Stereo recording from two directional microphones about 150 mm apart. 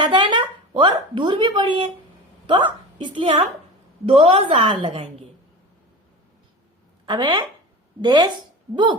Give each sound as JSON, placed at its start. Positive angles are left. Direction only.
{"t": 0.0, "sound": "a woman's voice", "side_deg": -30}
{"t": 7.0, "sound": "speech", "side_deg": -30}